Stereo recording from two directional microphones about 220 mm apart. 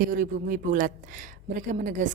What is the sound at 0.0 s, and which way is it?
Speech, 40° right (ahead or behind).